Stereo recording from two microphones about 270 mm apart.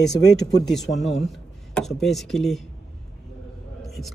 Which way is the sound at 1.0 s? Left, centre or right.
Centre.